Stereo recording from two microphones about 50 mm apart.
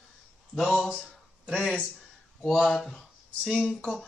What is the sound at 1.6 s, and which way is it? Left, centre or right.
Speech, centre.